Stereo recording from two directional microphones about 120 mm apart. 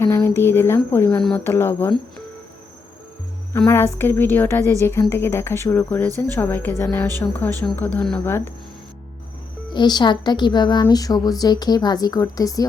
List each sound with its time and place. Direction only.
0.0 s a woman's voice: 20° left (ahead or behind)
3.7 s a woman's voice: 20° left (ahead or behind)
9.7 s a woman's voice: 35° left (ahead or behind)